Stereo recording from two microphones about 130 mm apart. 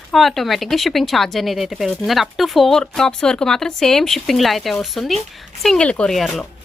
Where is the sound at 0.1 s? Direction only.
Centre (ahead or behind).